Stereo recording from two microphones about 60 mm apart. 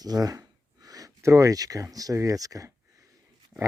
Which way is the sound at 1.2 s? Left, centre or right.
Right.